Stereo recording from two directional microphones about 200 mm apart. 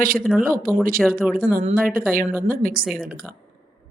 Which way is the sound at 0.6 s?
45° right (ahead or behind).